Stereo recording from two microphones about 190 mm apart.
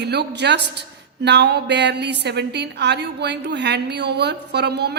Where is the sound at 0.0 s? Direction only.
60° right (ahead or behind).